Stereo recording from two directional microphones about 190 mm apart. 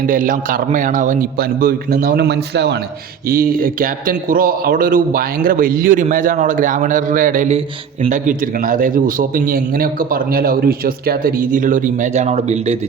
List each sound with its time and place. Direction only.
0.1 s a man's voice: 45° right (ahead or behind); by 2.7 s 60° right (ahead or behind)
3.2 s a man's voice: 50° right (ahead or behind)